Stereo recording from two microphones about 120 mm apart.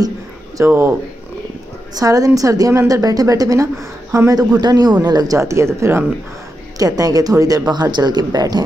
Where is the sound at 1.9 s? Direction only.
30° right (ahead or behind).